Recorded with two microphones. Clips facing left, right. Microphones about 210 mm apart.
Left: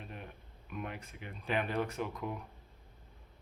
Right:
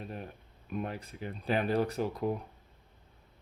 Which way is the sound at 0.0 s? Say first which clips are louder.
Right 6 dB; 35° right (ahead or behind).